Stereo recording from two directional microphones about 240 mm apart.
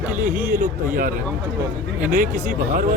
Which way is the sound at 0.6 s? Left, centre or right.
Right.